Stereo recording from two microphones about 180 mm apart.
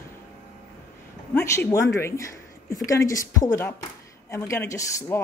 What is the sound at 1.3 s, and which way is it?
Speech, 15° left (ahead or behind).